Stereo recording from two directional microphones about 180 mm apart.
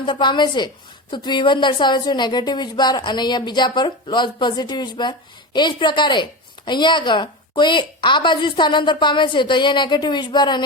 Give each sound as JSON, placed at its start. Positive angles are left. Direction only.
{"t": 0.0, "sound": "a woman's voice", "side_deg": 25}